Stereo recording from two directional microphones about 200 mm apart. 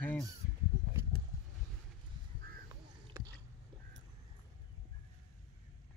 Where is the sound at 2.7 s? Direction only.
15° right (ahead or behind).